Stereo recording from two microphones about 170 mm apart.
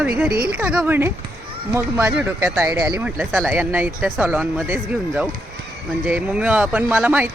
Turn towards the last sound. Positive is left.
turn(degrees=-10)  # may be behind; listen again after turning